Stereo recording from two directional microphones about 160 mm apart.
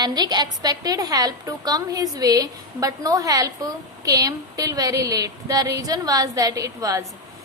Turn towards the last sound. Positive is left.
turn(degrees=-20)  # may be behind; listen again after turning